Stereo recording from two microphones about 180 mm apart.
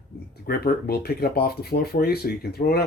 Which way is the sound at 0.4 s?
60° left (ahead or behind).